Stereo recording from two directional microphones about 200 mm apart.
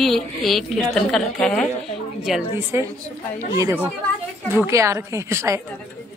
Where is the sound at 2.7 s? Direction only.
15° right (ahead or behind).